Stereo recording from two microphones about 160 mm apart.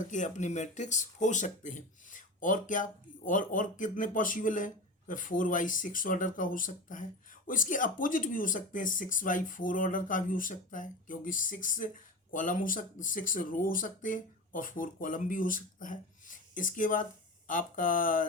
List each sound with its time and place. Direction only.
0.0 s speech: 50° left (ahead or behind)